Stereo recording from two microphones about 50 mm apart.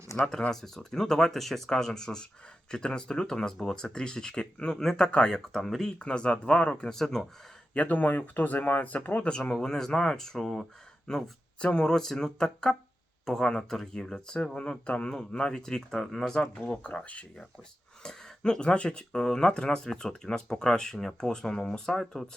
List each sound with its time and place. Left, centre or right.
0.1 s speech: left
0.5 s speech: centre
5.4 s speech: centre
6.0 s speech: left
6.8 s speech: centre
7.7 s speech: left
9.2 s speech: centre
9.5 s speech: centre
11.1 s speech: centre
18.0 s speech: centre